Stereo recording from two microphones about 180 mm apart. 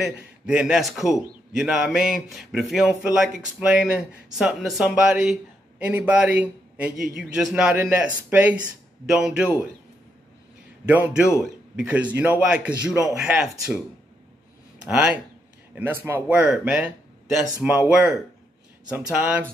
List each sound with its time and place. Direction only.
0.0 s speech: 5° right (ahead or behind)
11.7 s a man's voice: 10° right (ahead or behind)
14.9 s a man's voice: 5° right (ahead or behind)